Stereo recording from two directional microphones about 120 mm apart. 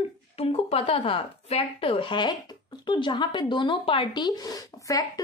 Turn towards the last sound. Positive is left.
turn(degrees=30)  # may be behind; listen again after turning